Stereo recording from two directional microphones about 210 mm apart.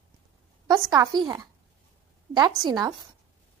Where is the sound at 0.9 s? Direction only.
20° right (ahead or behind).